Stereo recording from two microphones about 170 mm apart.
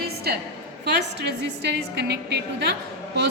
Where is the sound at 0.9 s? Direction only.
85° right.